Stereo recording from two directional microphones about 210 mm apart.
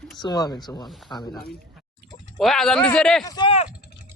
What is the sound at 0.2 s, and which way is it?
Speech, 20° left (ahead or behind).